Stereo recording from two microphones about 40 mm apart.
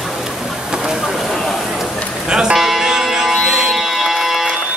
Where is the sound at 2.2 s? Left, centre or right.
Right.